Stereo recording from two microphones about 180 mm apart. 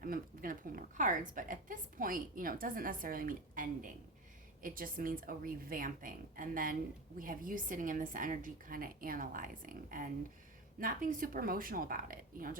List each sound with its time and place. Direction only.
0.0 s a woman's voice: 50° right (ahead or behind)